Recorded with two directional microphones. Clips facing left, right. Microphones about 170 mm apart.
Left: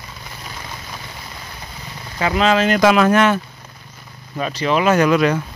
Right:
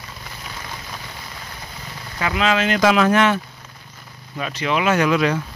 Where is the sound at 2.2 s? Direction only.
40° left (ahead or behind).